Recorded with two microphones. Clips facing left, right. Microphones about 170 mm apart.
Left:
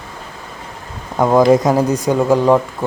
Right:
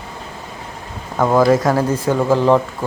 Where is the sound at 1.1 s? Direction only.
15° left (ahead or behind).